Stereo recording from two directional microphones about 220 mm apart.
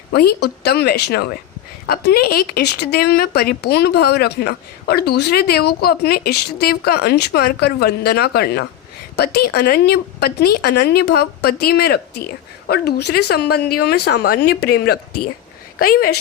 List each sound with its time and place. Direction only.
0.1 s a woman's voice: 45° left (ahead or behind)